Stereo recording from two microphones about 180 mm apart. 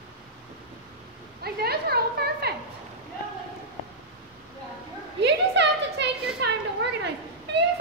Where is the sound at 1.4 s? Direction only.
60° right (ahead or behind).